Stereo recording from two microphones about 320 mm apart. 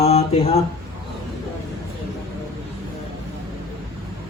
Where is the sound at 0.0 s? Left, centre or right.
Centre.